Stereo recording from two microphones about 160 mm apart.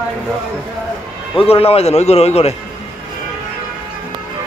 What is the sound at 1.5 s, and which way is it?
A man's voice, 40° left (ahead or behind).